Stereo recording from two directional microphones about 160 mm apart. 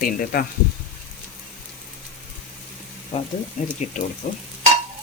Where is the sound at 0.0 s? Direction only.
60° left (ahead or behind).